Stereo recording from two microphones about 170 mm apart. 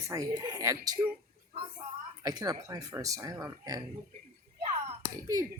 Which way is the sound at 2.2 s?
20° right (ahead or behind).